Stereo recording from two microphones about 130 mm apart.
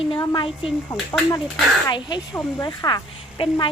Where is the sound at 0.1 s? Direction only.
40° left (ahead or behind).